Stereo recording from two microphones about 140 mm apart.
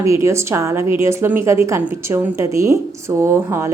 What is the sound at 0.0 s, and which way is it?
A woman's voice, 20° right (ahead or behind).